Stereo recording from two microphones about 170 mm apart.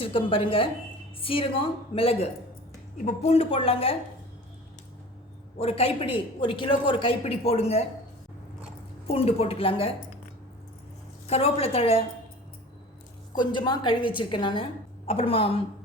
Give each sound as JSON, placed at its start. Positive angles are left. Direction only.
{"t": 0.0, "sound": "a man's voice", "side_deg": 30}
{"t": 5.5, "sound": "a man's voice", "side_deg": 35}
{"t": 9.0, "sound": "a man's voice", "side_deg": 35}
{"t": 11.3, "sound": "a man's voice", "side_deg": 35}
{"t": 13.4, "sound": "a woman's voice", "side_deg": 25}